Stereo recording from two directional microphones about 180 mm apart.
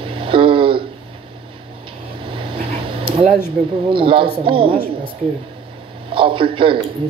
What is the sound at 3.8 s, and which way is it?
Speech, 30° right (ahead or behind).